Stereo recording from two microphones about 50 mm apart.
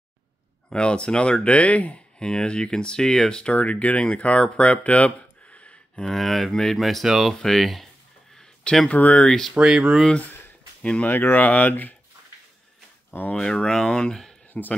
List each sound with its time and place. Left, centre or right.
0.7 s speech: centre
2.1 s speech: centre
3.5 s speech: left
6.0 s speech: centre
6.8 s speech: centre
8.4 s a sound: centre
8.8 s speech: left
9.2 s speech: centre
9.5 s speech: centre
10.8 s speech: left
11.1 s speech: left
11.3 s speech: left
13.3 s speech: centre
14.5 s speech: left